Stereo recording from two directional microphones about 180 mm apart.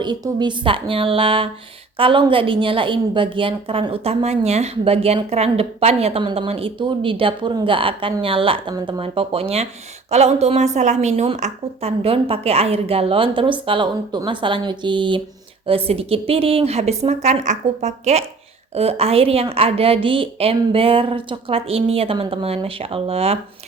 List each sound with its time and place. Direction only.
0.0 s a woman's voice: 25° right (ahead or behind)